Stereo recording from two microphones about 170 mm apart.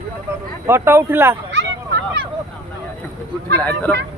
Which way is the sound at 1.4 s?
90° right.